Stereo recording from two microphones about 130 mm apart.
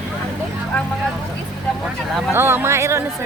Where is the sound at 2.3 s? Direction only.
20° right (ahead or behind).